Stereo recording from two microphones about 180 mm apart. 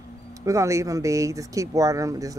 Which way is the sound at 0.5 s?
15° right (ahead or behind).